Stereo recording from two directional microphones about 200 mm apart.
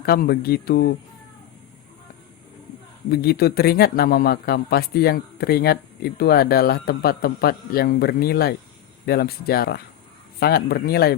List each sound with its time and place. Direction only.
0.0 s speech: 50° left (ahead or behind)
3.1 s speech: 50° left (ahead or behind)